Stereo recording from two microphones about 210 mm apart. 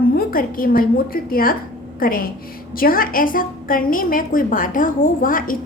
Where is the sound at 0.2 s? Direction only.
45° left (ahead or behind).